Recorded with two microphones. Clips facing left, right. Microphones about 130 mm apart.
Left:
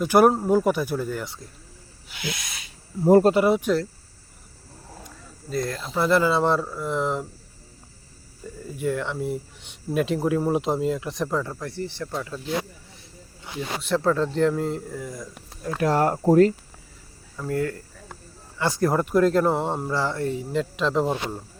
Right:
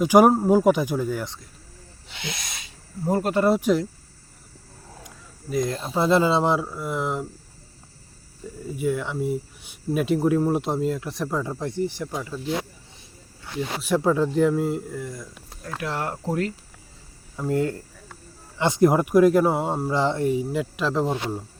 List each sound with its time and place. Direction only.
0.0 s speech: 10° right (ahead or behind)
2.0 s speech: 25° right (ahead or behind)
3.5 s speech: 10° right (ahead or behind)
5.0 s a sound: 15° right (ahead or behind)
5.9 s speech: 20° right (ahead or behind); by 7.3 s 5° right (ahead or behind)
8.7 s speech: 5° right (ahead or behind)
13.8 s speech: 15° right (ahead or behind)
15.8 s speech: 40° left (ahead or behind)
17.3 s speech: 20° right (ahead or behind)
19.9 s speech: 20° right (ahead or behind); by 21.3 s centre (ahead or behind)